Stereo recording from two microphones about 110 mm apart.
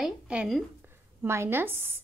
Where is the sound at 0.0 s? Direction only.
10° right (ahead or behind).